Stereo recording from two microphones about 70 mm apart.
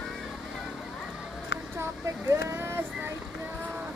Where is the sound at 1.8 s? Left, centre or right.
Right.